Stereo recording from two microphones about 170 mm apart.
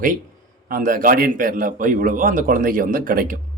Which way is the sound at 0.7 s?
55° right (ahead or behind).